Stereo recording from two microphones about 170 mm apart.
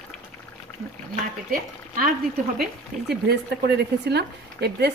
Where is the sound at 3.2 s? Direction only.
70° right (ahead or behind).